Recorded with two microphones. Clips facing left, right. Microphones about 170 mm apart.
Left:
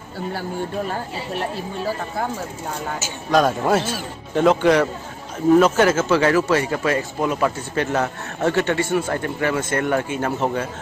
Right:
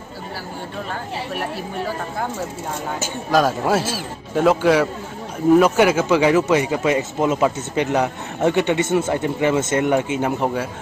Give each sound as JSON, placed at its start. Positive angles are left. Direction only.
{"t": 3.3, "sound": "a man's voice", "side_deg": -5}